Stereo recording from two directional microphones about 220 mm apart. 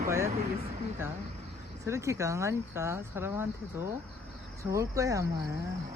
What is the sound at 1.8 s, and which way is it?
Speech, 15° right (ahead or behind).